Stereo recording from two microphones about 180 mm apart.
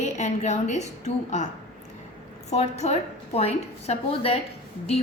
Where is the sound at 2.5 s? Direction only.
40° left (ahead or behind).